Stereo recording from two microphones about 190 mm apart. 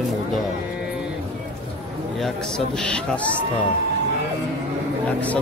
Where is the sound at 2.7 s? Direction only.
5° left (ahead or behind).